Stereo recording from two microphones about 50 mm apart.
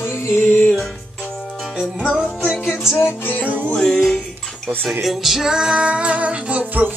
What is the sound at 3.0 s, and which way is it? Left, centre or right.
Music, left.